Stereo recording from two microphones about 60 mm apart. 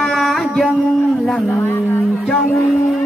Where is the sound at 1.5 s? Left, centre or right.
Left.